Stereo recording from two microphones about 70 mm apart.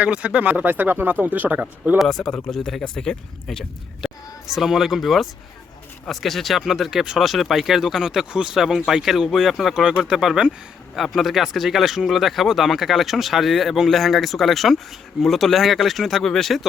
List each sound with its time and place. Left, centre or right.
0.0 s speech: centre
2.0 s speech: centre
4.0 s speech: centre